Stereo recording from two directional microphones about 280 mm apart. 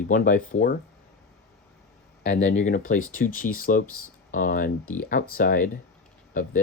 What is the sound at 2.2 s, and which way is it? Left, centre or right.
Speech, left.